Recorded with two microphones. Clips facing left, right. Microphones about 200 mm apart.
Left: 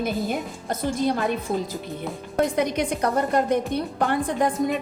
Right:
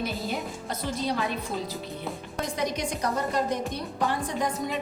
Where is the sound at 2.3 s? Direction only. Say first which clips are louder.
Left 8 dB; 55° left (ahead or behind).